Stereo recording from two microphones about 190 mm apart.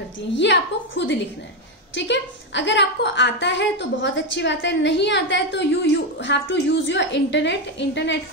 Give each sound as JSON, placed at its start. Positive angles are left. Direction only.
{"t": 0.4, "sound": "a woman's voice", "side_deg": 70}